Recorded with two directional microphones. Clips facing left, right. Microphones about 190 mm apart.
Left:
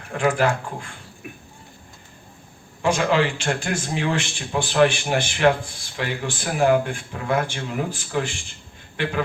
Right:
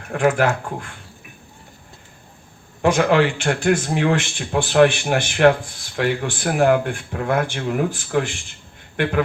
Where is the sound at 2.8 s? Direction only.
55° right (ahead or behind).